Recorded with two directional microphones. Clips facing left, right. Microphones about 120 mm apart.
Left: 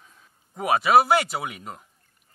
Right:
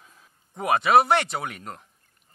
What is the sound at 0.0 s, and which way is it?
A man's voice, centre (ahead or behind).